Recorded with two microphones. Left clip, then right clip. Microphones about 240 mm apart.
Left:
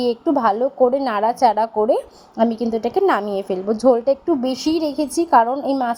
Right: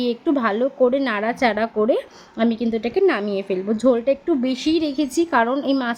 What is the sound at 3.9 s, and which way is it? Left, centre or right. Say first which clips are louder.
Speech: left 2 dB; centre.